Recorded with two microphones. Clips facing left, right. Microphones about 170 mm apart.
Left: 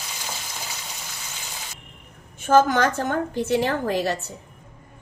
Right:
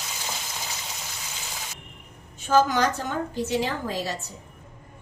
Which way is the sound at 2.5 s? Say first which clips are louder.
Left 3 dB; 55° left (ahead or behind).